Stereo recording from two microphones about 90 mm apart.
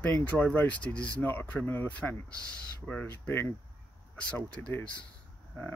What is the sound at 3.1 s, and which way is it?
Speech, 25° left (ahead or behind).